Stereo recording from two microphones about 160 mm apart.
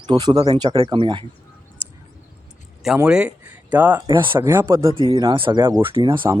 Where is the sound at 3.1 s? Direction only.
5° right (ahead or behind).